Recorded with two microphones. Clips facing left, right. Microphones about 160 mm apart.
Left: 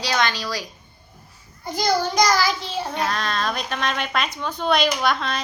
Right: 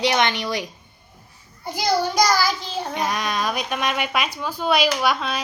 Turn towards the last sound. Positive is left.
turn(degrees=-10)  # may be behind; listen again after turning